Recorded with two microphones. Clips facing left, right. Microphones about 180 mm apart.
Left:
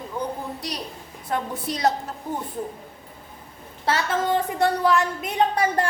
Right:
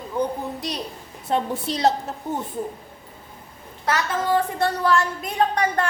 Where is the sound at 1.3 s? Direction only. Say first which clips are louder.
Right 3 dB; 25° right (ahead or behind).